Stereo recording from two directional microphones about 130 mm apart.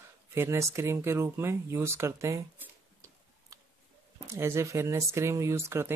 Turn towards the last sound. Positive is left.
turn(degrees=-20)  # may be behind; listen again after turning